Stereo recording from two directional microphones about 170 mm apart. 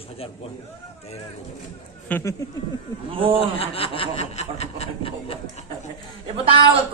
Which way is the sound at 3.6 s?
35° left (ahead or behind).